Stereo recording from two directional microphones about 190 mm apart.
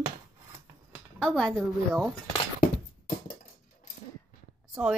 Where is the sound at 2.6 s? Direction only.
45° left (ahead or behind).